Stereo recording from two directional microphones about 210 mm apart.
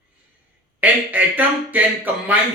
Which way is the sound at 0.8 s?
10° right (ahead or behind).